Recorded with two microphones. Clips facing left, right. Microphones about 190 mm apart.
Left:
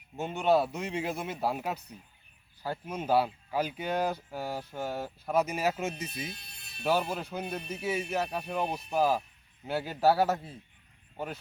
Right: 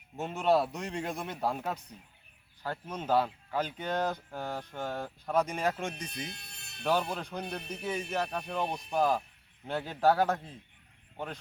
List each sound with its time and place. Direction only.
0.2 s a man's voice: centre (ahead or behind)